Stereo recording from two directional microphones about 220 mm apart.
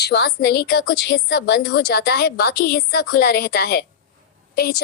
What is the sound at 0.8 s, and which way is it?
A woman's voice, 55° left (ahead or behind).